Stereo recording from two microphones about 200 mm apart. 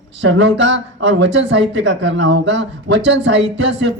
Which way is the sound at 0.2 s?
65° right (ahead or behind).